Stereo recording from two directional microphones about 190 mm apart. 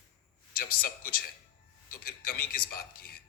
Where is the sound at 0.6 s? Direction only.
50° left (ahead or behind).